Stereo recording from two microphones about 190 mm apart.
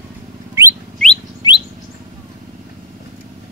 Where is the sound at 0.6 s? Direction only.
15° right (ahead or behind).